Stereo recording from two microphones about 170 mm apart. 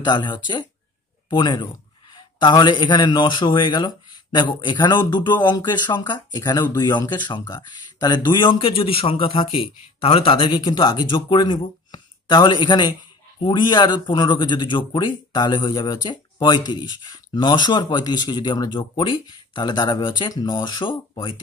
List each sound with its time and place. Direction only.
0.0 s a man's voice: 25° left (ahead or behind)